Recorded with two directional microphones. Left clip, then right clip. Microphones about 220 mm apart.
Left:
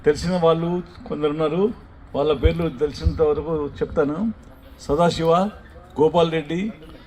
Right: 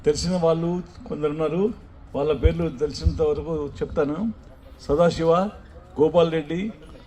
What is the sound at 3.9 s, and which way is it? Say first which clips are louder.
A man's voice: left 2 dB; 55° left (ahead or behind).